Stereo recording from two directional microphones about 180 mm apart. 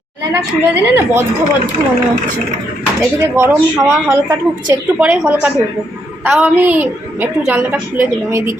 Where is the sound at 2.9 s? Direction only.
15° right (ahead or behind).